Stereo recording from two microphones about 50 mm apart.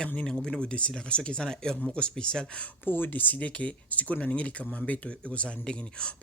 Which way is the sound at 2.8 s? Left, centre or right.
Left.